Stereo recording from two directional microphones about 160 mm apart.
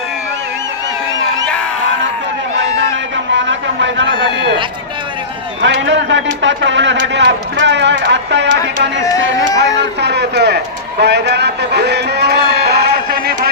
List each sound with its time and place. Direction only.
5.6 s a man's voice: 90° right
9.0 s speech: 20° left (ahead or behind)
9.6 s a man's voice: 90° right
11.0 s a sound: 90° right